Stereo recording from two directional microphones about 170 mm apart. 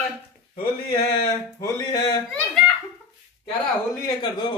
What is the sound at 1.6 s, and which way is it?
Speech, 25° left (ahead or behind).